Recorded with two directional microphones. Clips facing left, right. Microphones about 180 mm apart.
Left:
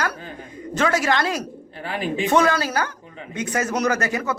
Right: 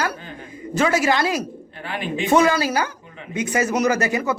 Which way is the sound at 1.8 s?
35° left (ahead or behind).